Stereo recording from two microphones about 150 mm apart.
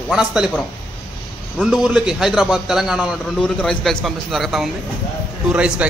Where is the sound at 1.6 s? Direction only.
Centre (ahead or behind).